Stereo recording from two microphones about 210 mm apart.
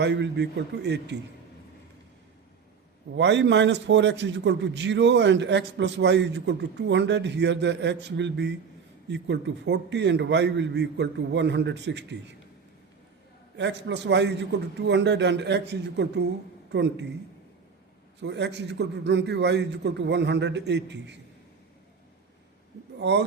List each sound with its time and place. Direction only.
0.0 s a man's voice: 55° right (ahead or behind)
3.2 s a man's voice: 55° right (ahead or behind)
13.6 s a man's voice: 55° right (ahead or behind)
18.2 s a man's voice: 55° right (ahead or behind)
23.0 s a man's voice: 55° right (ahead or behind)